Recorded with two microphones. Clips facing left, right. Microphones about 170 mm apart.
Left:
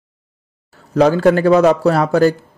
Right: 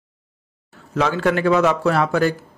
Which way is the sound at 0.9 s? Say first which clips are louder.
Left 7 dB; 40° left (ahead or behind).